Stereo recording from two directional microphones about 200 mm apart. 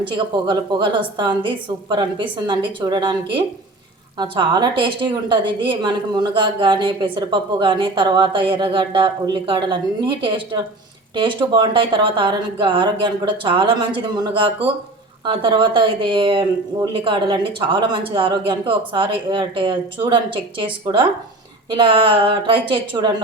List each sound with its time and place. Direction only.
0.0 s a woman's voice: 20° right (ahead or behind)